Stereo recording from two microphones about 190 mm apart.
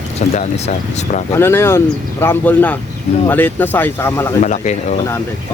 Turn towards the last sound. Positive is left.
turn(degrees=40)  # may be behind; listen again after turning